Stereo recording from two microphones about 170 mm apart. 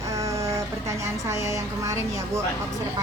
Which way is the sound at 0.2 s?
15° right (ahead or behind).